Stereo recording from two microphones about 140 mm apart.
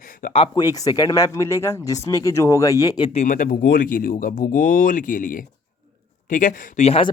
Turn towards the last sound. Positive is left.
turn(degrees=45)  # may be behind; listen again after turning